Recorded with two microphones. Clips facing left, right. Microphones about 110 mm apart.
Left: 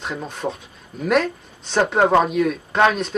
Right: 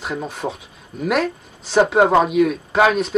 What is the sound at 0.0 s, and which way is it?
Speech, 5° right (ahead or behind).